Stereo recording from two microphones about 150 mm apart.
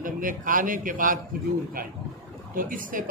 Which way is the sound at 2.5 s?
65° right (ahead or behind).